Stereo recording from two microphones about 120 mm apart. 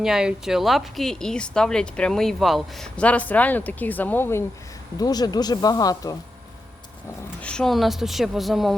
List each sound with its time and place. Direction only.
0.0 s speech: 5° right (ahead or behind); by 4.4 s 20° left (ahead or behind)
4.9 s speech: 30° left (ahead or behind)
7.4 s speech: 5° left (ahead or behind)